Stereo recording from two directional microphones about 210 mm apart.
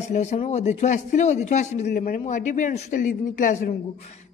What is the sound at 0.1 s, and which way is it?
Speech, 35° left (ahead or behind).